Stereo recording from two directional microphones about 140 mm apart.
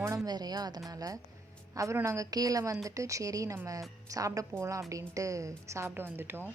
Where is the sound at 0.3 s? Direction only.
30° right (ahead or behind).